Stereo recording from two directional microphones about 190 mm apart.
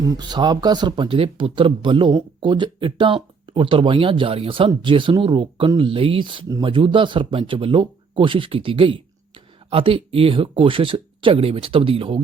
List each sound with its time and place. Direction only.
0.2 s speech: 20° right (ahead or behind)